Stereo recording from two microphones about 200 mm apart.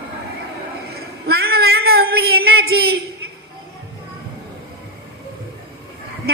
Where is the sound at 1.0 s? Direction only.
50° right (ahead or behind).